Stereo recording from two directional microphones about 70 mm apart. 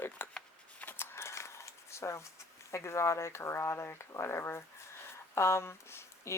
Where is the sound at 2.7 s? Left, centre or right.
Left.